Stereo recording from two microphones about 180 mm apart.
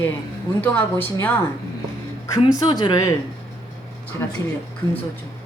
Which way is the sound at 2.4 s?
25° left (ahead or behind).